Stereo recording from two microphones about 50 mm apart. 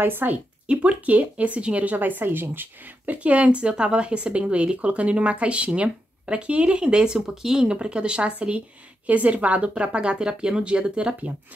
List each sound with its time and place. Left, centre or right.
0.0 s speech: right
0.7 s speech: right
3.2 s speech: right